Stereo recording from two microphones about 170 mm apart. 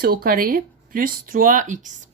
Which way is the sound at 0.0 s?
60° right (ahead or behind).